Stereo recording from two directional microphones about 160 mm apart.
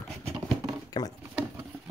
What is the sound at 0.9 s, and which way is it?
Speech, 25° left (ahead or behind).